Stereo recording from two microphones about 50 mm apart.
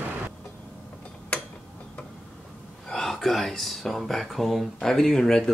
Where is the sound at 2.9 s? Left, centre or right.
Centre.